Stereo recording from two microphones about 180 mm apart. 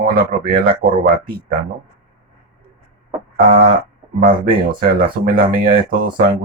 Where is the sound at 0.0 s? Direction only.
55° right (ahead or behind).